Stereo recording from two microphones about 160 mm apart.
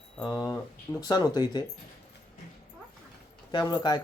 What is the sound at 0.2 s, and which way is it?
Speech, 25° left (ahead or behind).